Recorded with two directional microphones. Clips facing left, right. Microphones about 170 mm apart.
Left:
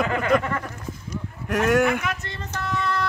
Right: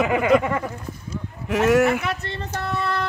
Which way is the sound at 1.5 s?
5° right (ahead or behind).